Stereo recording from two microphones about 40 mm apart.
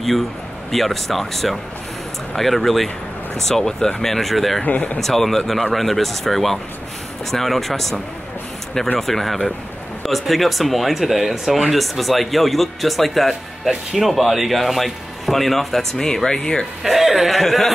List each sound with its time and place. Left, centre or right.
0.7 s speech: centre
4.6 s speech: left
5.0 s speech: centre
8.9 s speech: centre
16.3 s speech: centre
16.8 s speech: centre